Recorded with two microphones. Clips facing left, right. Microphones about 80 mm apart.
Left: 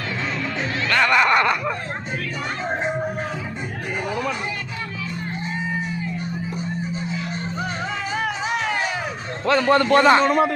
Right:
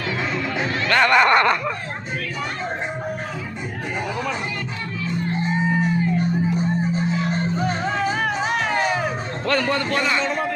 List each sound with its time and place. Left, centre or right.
0.3 s music: centre
0.9 s a sound: centre
6.9 s music: right
9.6 s a man's voice: left